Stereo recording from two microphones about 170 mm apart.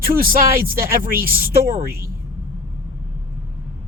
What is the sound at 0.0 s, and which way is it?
Speech, 60° right (ahead or behind).